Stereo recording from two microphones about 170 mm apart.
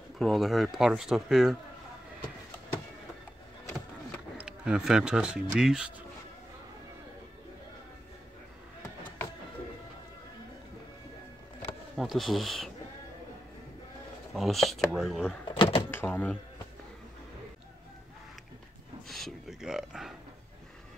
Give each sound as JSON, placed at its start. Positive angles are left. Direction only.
{"t": 0.2, "sound": "speech", "side_deg": 0}
{"t": 4.4, "sound": "speech", "side_deg": -5}
{"t": 12.0, "sound": "speech", "side_deg": 0}
{"t": 14.3, "sound": "speech", "side_deg": 0}
{"t": 15.4, "sound": "door", "side_deg": 30}
{"t": 15.9, "sound": "speech", "side_deg": 10}
{"t": 19.0, "sound": "a sound", "side_deg": 0}